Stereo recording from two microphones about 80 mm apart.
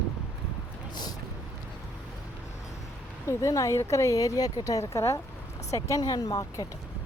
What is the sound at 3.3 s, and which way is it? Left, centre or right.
Speech, left.